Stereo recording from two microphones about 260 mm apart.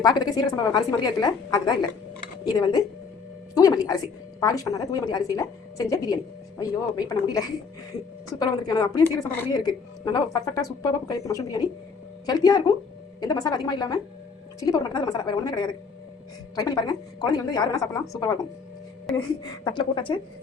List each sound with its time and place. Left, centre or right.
0.0 s a woman's voice: centre
19.6 s a woman's voice: centre